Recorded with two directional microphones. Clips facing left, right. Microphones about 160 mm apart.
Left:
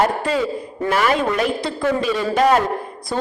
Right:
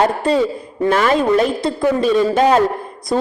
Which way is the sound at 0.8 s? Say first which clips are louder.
Right 4 dB; 30° right (ahead or behind).